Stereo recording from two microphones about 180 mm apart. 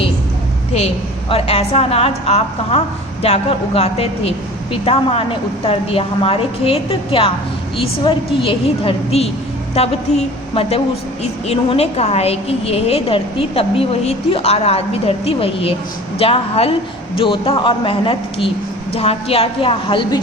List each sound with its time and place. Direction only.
1.3 s a woman's voice: 35° left (ahead or behind)